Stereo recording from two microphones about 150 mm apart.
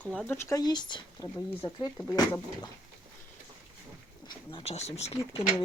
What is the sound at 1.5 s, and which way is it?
Speech, 15° left (ahead or behind).